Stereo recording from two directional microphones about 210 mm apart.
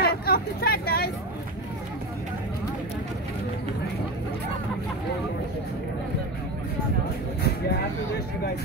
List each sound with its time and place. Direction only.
0.0 s hubbub: 45° left (ahead or behind)